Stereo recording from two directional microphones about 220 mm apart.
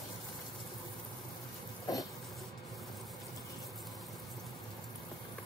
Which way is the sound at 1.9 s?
15° left (ahead or behind).